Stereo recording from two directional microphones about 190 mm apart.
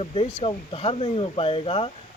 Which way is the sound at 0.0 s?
30° left (ahead or behind).